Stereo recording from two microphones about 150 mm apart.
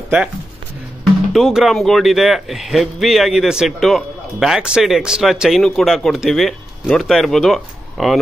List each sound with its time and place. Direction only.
1.3 s speech: centre (ahead or behind)